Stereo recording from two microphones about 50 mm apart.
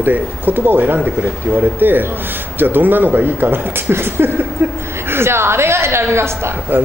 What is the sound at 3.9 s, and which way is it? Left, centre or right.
A man's voice, right.